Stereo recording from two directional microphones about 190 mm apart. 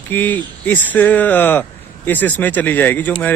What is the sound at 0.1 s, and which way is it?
Speech, 10° left (ahead or behind).